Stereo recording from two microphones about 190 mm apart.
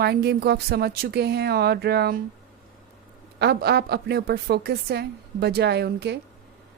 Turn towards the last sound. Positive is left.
turn(degrees=-60)  # may be behind; listen again after turning